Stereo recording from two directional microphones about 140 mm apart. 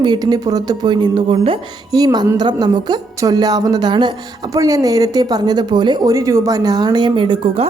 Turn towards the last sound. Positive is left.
turn(degrees=-35)  # may be behind; listen again after turning